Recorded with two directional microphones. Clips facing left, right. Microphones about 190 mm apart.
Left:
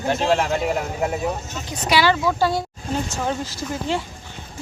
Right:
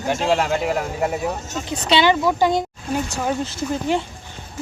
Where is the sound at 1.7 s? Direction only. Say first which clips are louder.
Right 2 dB; 25° right (ahead or behind).